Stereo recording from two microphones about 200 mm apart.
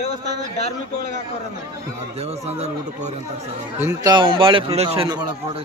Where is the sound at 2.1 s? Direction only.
30° right (ahead or behind).